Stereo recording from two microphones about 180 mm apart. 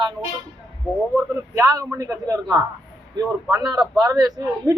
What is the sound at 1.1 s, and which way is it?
A man's voice, 15° right (ahead or behind).